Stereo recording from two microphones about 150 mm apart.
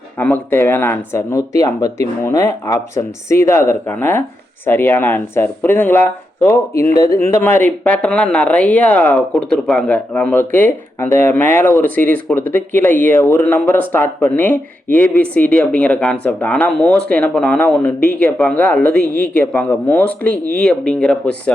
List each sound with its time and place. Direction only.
0.2 s speech: 15° left (ahead or behind)